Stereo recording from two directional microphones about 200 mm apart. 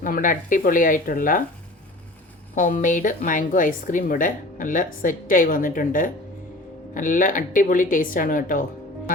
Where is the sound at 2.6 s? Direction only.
40° left (ahead or behind).